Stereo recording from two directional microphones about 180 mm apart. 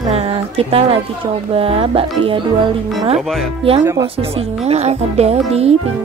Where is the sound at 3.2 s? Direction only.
Centre (ahead or behind).